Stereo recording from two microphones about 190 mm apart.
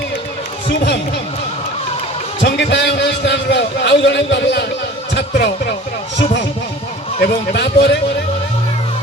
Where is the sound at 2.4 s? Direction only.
65° left (ahead or behind).